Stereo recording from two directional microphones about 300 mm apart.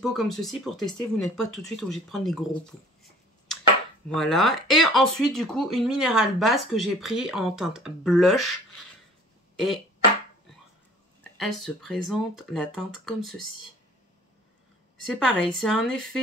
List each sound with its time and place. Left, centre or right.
0.0 s speech: centre
4.1 s speech: centre
11.3 s speech: centre
15.0 s speech: centre